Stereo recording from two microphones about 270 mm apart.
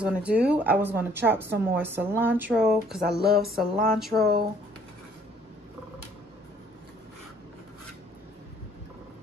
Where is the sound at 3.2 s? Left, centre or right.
Right.